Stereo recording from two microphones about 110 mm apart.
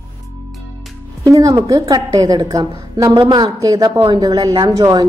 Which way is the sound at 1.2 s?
30° right (ahead or behind).